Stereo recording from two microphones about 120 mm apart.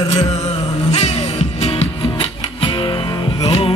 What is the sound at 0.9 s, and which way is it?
Music, 60° left (ahead or behind).